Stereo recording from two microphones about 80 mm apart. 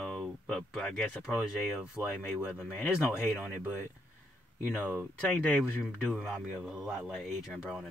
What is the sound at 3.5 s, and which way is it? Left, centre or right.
Speech, left.